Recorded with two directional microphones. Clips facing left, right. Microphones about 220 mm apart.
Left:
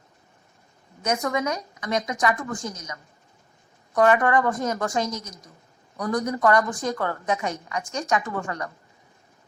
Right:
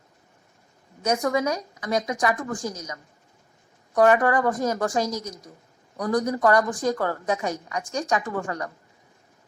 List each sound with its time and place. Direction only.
1.0 s a woman's voice: 35° right (ahead or behind)